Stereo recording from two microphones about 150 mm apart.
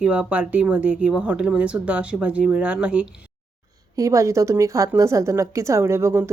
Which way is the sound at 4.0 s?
20° right (ahead or behind).